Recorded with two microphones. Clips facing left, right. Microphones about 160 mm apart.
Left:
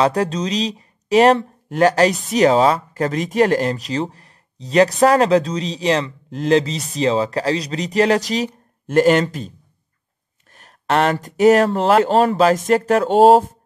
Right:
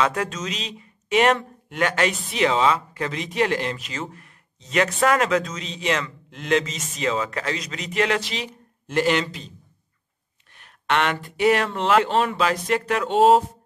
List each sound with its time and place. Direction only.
0.0 s a man's voice: 35° left (ahead or behind)
10.5 s speech: 40° left (ahead or behind)